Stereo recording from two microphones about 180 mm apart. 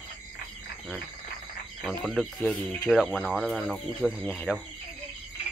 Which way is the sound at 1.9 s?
Centre (ahead or behind).